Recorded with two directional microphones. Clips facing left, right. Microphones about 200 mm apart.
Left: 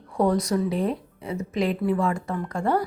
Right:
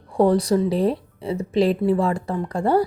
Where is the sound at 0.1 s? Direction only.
30° right (ahead or behind).